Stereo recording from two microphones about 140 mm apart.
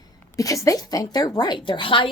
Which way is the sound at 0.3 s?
25° left (ahead or behind).